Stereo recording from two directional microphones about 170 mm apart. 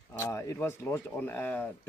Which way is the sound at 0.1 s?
15° left (ahead or behind).